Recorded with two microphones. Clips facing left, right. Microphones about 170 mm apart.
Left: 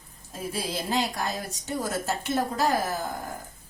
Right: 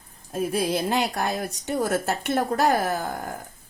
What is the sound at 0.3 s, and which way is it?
A woman's voice, 60° right (ahead or behind).